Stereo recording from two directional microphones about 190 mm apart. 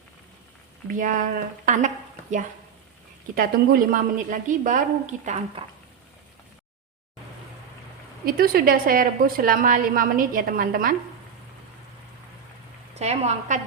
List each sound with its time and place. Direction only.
0.9 s a woman's voice: 45° right (ahead or behind)
3.3 s a woman's voice: 50° right (ahead or behind)
8.2 s a woman's voice: 50° right (ahead or behind)
13.0 s a woman's voice: 35° right (ahead or behind)